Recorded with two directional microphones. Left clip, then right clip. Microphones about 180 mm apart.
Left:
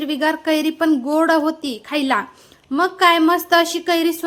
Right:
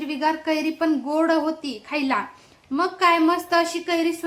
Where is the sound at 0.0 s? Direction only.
25° left (ahead or behind).